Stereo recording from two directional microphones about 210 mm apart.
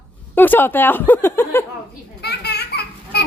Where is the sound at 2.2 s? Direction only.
50° left (ahead or behind).